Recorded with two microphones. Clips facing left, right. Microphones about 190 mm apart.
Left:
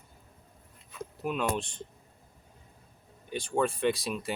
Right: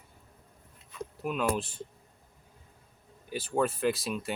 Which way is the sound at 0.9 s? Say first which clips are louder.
Left 1 dB; centre (ahead or behind).